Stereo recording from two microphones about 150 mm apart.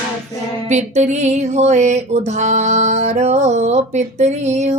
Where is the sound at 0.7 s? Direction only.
50° right (ahead or behind).